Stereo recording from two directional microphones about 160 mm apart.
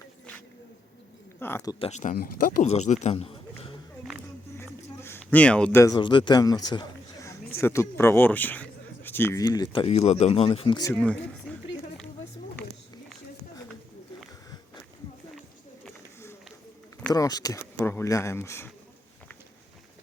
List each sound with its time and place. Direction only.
1.4 s speech: 15° left (ahead or behind)
1.8 s speech: 45° left (ahead or behind)
2.1 s speech: 65° left (ahead or behind)
2.6 s a man's voice: 45° left (ahead or behind)
4.5 s a sound: 15° left (ahead or behind)
5.8 s a man's voice: 25° left (ahead or behind); by 8.6 s 10° left (ahead or behind)
9.0 s a sound: 15° left (ahead or behind)
9.4 s speech: 25° left (ahead or behind)
9.8 s speech: 40° left (ahead or behind); by 10.9 s 25° left (ahead or behind)
10.9 s speech: 5° left (ahead or behind)
17.1 s speech: 25° left (ahead or behind)